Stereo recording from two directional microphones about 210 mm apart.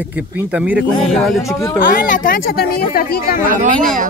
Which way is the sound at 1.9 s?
40° left (ahead or behind).